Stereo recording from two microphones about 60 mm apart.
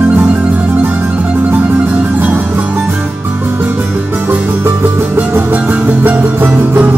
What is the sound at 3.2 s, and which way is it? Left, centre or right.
Music, right.